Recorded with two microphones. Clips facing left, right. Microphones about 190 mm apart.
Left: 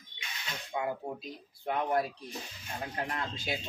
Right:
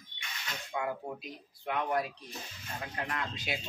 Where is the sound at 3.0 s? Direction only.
25° left (ahead or behind).